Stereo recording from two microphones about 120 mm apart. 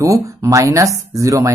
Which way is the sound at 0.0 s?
25° right (ahead or behind).